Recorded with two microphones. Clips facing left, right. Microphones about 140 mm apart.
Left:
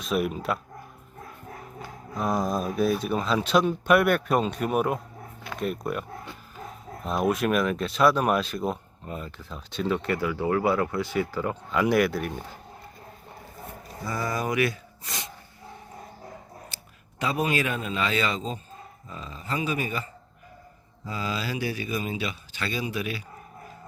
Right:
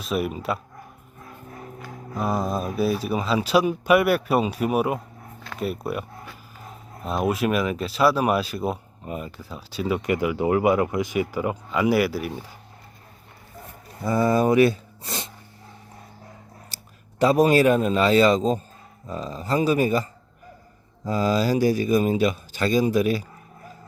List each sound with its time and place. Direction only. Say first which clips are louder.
0.0 s speech: right 1 dB; centre (ahead or behind)
2.1 s speech: right 1 dB; 5° right (ahead or behind)
14.0 s speech: right 9 dB; 25° right (ahead or behind)
16.6 s speech: left 1 dB; 40° right (ahead or behind)